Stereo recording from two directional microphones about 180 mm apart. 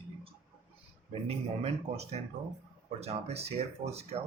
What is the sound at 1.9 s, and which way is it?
Speech, 35° right (ahead or behind).